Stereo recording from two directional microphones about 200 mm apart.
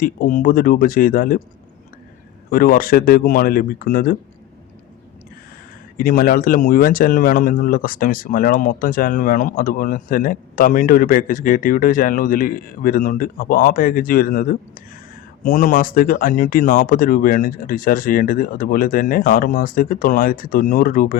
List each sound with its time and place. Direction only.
0.0 s speech: 45° left (ahead or behind)
2.5 s speech: 45° left (ahead or behind)
6.0 s speech: 45° left (ahead or behind)